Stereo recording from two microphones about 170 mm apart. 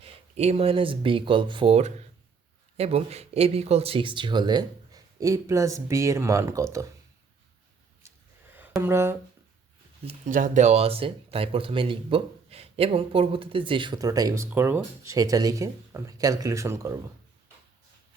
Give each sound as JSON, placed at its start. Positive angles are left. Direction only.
{"t": 0.0, "sound": "speech", "side_deg": -35}
{"t": 8.0, "sound": "gasp", "side_deg": -15}
{"t": 8.8, "sound": "speech", "side_deg": -15}
{"t": 10.0, "sound": "speech", "side_deg": -35}
{"t": 10.3, "sound": "speech", "side_deg": -45}